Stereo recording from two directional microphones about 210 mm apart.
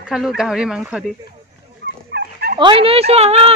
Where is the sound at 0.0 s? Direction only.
Centre (ahead or behind).